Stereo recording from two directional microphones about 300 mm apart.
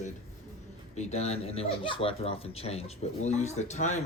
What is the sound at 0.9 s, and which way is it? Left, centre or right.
Speech, left.